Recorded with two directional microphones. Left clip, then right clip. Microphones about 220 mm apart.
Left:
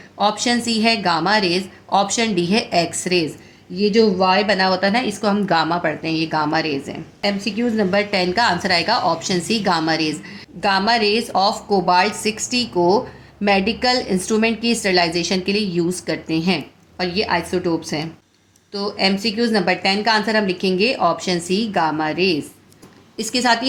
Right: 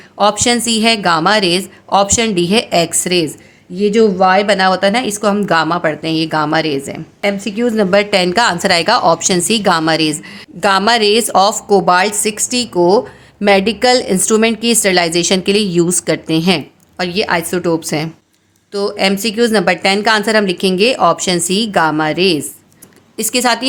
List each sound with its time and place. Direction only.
0.2 s speech: 45° right (ahead or behind)